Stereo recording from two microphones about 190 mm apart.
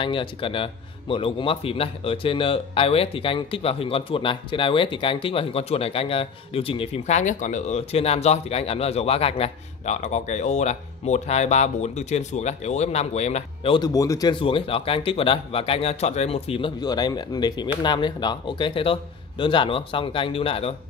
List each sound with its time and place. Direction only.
0.0 s a man's voice: 25° left (ahead or behind)
13.7 s speech: 20° left (ahead or behind)